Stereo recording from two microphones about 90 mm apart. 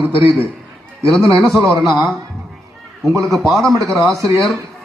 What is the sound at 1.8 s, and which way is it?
Speech, centre (ahead or behind).